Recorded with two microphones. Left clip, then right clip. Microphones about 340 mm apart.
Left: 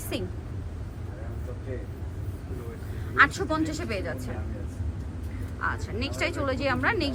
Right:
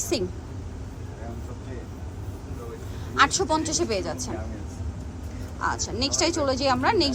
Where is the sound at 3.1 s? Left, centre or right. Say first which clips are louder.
Right 1 dB; centre.